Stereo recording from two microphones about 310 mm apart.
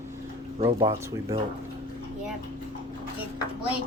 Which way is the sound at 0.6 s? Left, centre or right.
Centre.